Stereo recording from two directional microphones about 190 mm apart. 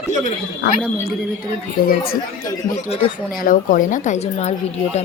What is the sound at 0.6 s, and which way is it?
A woman's voice, 55° left (ahead or behind).